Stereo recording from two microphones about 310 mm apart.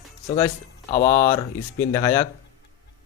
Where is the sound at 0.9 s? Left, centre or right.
Left.